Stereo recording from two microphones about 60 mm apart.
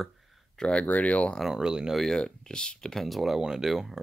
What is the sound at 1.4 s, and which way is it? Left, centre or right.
Speech, centre.